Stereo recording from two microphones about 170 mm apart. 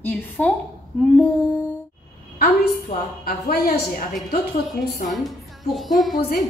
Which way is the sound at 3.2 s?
60° left (ahead or behind).